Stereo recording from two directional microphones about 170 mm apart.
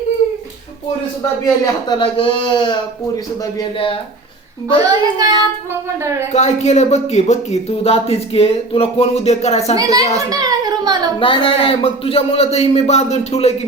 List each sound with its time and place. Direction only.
1.6 s speech: 25° left (ahead or behind)
4.8 s a child's voice: 25° right (ahead or behind)
6.3 s speech: 40° left (ahead or behind)
9.7 s a child's voice: 20° right (ahead or behind)
10.2 s a sound: 20° right (ahead or behind)
11.2 s speech: 30° left (ahead or behind)